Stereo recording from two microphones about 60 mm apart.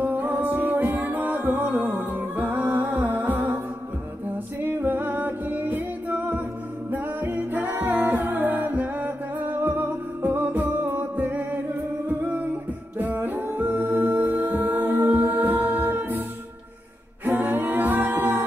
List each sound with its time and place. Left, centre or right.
0.0 s music: right
4.6 s music: right
6.9 s a capella: right
12.1 s humming: right
12.9 s a capella: right